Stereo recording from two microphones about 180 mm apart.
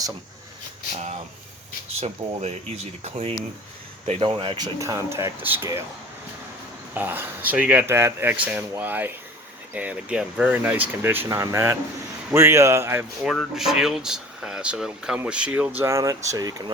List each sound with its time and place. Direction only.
2.0 s speech: 35° right (ahead or behind); by 5.8 s 15° right (ahead or behind)
6.9 s speech: 10° right (ahead or behind)
13.3 s speech: centre (ahead or behind); by 16.7 s 20° right (ahead or behind)